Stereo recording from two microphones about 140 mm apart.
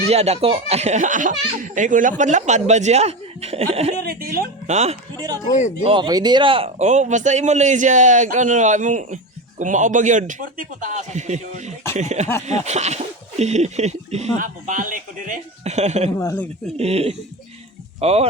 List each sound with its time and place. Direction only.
0.1 s speech: 50° right (ahead or behind)
4.1 s speech: 90° right
4.6 s speech: 55° right (ahead or behind)
5.5 s speech: 60° left (ahead or behind)
5.8 s speech: 35° right (ahead or behind); by 14.4 s 50° right (ahead or behind)
14.4 s speech: 70° right (ahead or behind); by 16.1 s 50° right (ahead or behind)
16.1 s speech: 15° left (ahead or behind)
16.7 s speech: 45° right (ahead or behind)